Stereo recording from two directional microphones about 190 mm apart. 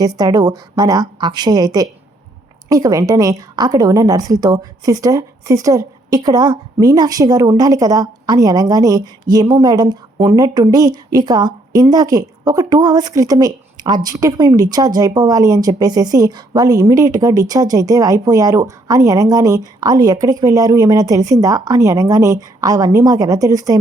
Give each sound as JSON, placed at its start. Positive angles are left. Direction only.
{"t": 0.0, "sound": "a woman's voice", "side_deg": -20}